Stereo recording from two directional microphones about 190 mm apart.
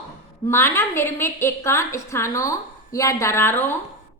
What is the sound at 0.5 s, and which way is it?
A woman's voice, 15° left (ahead or behind).